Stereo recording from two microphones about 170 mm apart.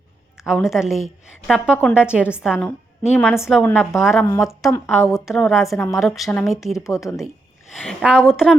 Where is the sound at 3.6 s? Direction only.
10° left (ahead or behind).